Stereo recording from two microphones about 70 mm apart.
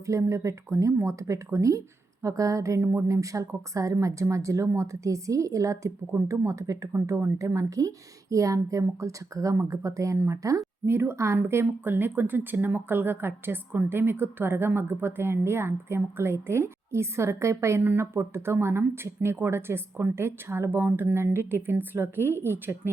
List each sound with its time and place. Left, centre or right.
0.0 s a woman's voice: right
10.8 s speech: right